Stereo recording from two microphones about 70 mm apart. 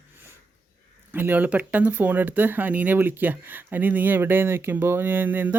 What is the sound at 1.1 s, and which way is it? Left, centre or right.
Speech, right.